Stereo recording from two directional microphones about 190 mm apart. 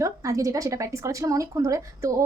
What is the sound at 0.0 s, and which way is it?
A woman's voice, 15° right (ahead or behind).